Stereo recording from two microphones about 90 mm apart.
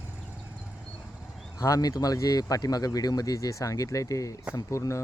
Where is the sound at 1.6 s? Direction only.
40° left (ahead or behind).